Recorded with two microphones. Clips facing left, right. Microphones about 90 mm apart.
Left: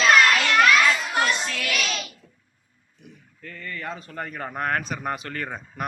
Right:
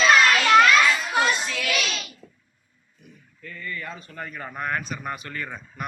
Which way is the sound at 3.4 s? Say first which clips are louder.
Left 1 dB; 55° left (ahead or behind).